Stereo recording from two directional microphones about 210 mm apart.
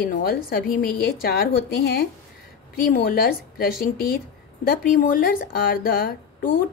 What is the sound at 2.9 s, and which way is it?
Speech, 45° left (ahead or behind).